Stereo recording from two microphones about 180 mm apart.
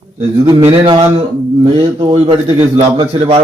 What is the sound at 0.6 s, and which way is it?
A man's voice, 30° right (ahead or behind).